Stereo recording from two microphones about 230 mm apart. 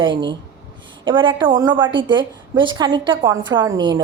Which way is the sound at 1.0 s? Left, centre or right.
Right.